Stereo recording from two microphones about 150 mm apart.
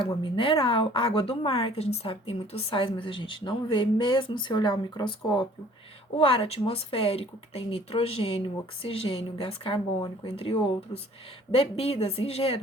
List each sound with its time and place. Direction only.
0.0 s a woman's voice: 35° left (ahead or behind)